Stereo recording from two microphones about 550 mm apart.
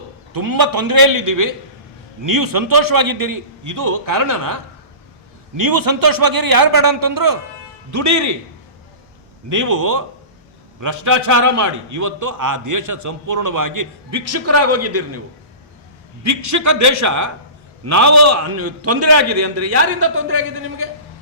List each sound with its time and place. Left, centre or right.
0.3 s a man's voice: right
5.5 s a man's voice: right
9.5 s a man's voice: right
16.2 s a man's voice: right